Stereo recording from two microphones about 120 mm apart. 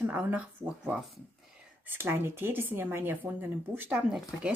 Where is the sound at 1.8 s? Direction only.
20° right (ahead or behind).